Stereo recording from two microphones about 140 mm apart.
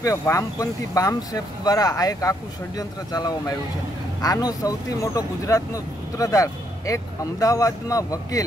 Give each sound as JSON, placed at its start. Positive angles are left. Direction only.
{"t": 0.0, "sound": "speech", "side_deg": 20}